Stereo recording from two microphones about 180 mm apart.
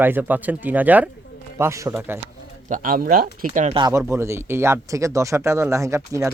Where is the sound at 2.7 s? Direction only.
50° right (ahead or behind).